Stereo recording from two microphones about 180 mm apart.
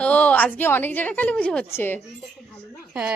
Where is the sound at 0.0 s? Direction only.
10° left (ahead or behind).